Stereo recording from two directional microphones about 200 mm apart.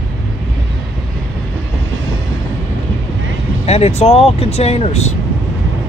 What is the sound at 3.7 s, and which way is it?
Speech, 30° left (ahead or behind).